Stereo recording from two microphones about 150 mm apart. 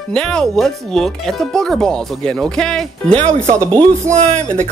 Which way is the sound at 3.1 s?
50° right (ahead or behind).